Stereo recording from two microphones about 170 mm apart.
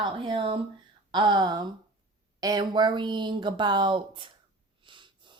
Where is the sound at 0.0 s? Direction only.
30° right (ahead or behind).